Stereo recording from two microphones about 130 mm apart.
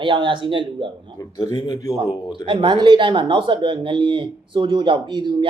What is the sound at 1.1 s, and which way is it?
Speech, 30° left (ahead or behind).